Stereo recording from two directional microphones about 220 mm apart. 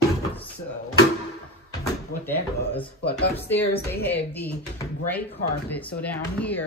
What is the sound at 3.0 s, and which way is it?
Speech, 10° left (ahead or behind).